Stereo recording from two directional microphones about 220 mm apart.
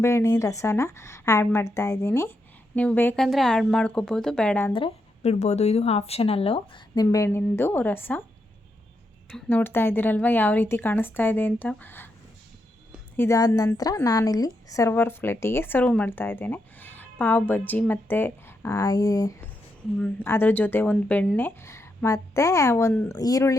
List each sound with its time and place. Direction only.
0.0 s a woman's voice: 10° left (ahead or behind)
4.7 s speech: 25° left (ahead or behind); by 8.2 s 10° left (ahead or behind)
9.3 s a woman's voice: 10° left (ahead or behind)
13.1 s a woman's voice: 15° left (ahead or behind)